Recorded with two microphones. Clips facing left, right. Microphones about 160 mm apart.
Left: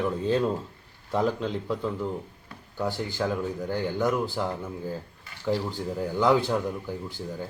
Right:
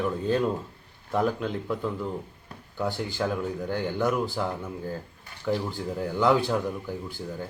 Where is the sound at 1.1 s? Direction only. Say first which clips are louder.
Even; 20° left (ahead or behind).